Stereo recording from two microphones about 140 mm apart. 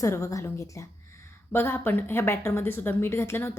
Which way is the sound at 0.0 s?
25° left (ahead or behind).